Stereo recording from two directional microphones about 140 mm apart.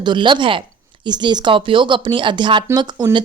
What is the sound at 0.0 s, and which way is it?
A woman's voice, 35° right (ahead or behind).